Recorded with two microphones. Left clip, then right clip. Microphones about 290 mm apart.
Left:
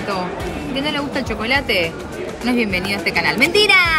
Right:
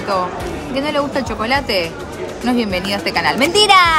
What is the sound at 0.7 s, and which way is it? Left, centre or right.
Speech, centre.